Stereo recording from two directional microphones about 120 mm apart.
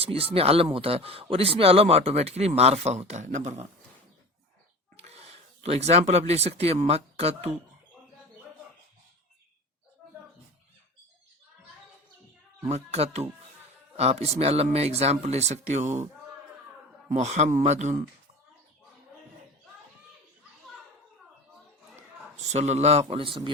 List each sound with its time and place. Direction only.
0.0 s speech: 55° right (ahead or behind); by 3.7 s 75° right (ahead or behind)
4.9 s speech: 60° right (ahead or behind)
12.6 s speech: 65° right (ahead or behind)
17.2 s speech: 70° right (ahead or behind)
22.5 s speech: 70° right (ahead or behind); by 23.5 s 50° right (ahead or behind)